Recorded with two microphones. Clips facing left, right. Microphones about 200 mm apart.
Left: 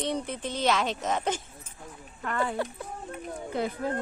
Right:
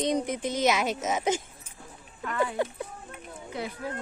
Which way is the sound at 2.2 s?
50° left (ahead or behind).